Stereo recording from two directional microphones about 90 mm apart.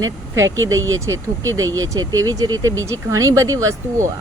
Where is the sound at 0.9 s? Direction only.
35° right (ahead or behind).